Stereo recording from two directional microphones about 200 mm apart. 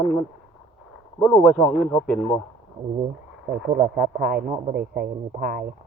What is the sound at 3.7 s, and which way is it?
A man's voice, 40° right (ahead or behind).